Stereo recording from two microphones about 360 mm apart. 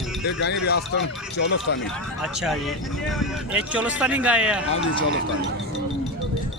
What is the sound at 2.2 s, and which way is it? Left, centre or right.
Speech, centre.